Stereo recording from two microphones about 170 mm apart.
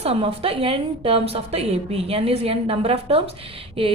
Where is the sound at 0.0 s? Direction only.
35° right (ahead or behind).